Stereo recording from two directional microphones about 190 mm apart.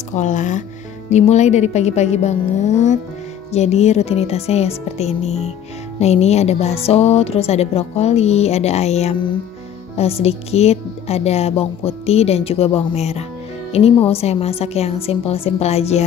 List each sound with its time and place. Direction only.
0.1 s a woman's voice: 40° left (ahead or behind)